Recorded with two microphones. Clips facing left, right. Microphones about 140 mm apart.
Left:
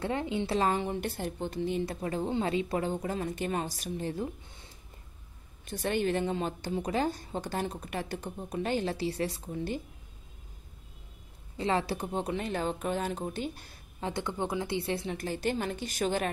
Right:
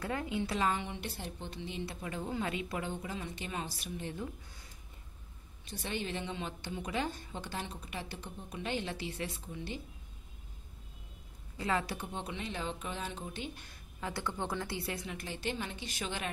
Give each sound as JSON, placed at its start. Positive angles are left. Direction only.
{"t": 0.0, "sound": "a woman's voice", "side_deg": 25}
{"t": 5.7, "sound": "a woman's voice", "side_deg": 55}
{"t": 11.5, "sound": "a woman's voice", "side_deg": 30}
{"t": 15.1, "sound": "a woman's voice", "side_deg": 45}